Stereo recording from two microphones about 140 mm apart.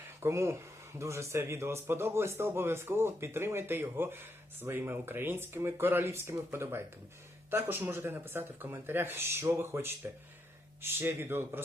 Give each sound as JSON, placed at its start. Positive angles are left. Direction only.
{"t": 0.2, "sound": "speech", "side_deg": -20}
{"t": 10.9, "sound": "speech", "side_deg": -15}